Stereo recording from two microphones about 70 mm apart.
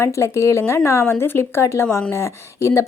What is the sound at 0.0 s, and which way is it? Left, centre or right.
Speech, left.